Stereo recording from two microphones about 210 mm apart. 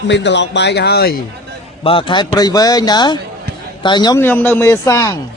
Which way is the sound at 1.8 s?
25° left (ahead or behind).